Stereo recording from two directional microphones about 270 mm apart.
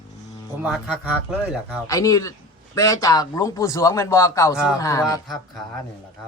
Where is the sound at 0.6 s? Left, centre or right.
Centre.